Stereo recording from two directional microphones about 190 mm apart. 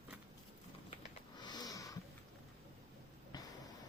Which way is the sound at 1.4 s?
20° left (ahead or behind).